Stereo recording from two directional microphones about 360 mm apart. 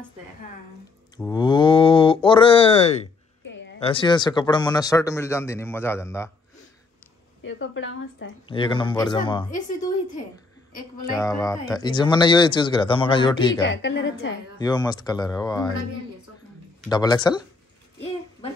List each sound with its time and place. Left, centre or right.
1.1 s mantra: centre
3.4 s a sound: left
3.8 s speech: centre
7.4 s a woman's voice: left
8.5 s speech: centre
11.0 s speech: centre
13.7 s a woman's voice: left
14.6 s speech: centre
16.9 s speech: centre